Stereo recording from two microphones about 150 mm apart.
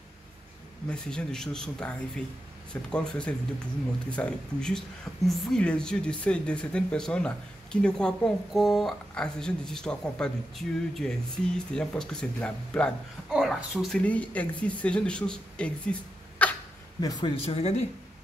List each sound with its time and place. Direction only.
0.8 s speech: 5° left (ahead or behind)
13.3 s speech: 5° right (ahead or behind)
17.0 s speech: 25° left (ahead or behind)
17.5 s speech: 45° left (ahead or behind)